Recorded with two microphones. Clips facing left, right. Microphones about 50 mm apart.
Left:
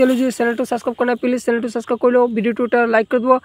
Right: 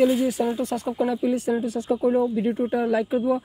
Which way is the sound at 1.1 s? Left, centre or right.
Left.